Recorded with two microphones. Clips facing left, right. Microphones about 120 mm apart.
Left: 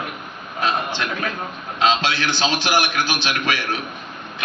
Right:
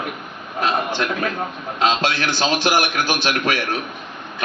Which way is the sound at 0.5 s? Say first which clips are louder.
Right 2 dB; 50° right (ahead or behind).